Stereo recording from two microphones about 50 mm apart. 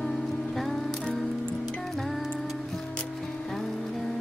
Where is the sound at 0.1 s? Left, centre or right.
Centre.